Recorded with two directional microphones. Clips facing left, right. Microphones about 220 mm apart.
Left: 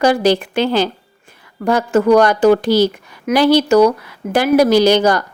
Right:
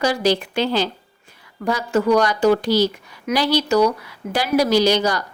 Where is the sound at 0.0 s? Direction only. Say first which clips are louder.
Left 5 dB; 55° left (ahead or behind).